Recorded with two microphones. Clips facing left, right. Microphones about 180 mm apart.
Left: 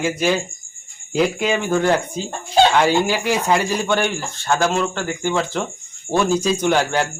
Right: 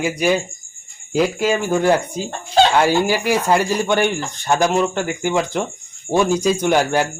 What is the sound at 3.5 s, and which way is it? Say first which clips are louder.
Speech: right 2 dB; 10° right (ahead or behind).